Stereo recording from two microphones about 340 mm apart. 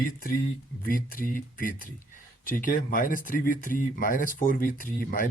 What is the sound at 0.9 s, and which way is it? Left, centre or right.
Speech, left.